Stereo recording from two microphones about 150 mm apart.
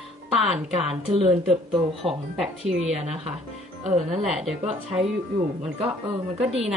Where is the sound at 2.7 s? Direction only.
45° right (ahead or behind).